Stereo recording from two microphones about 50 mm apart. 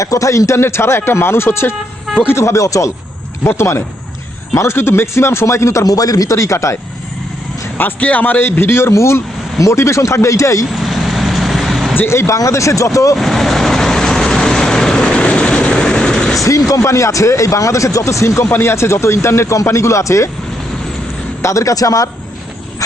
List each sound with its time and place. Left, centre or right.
0.0 s speech: left
0.6 s speech: left
2.3 s speech: left
3.4 s speech: left
7.8 s a man's voice: left
8.9 s speech: left
10.7 s vehicle: centre
12.0 s speech: left
13.1 s vehicle: centre
15.1 s vehicle: left
16.4 s speech: left
18.5 s speech: left
21.4 s speech: left